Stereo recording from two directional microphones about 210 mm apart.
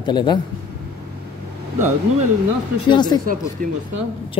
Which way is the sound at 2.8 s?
20° left (ahead or behind).